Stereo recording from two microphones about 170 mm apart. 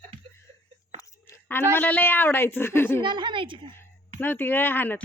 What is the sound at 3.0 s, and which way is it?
Speech, 25° right (ahead or behind).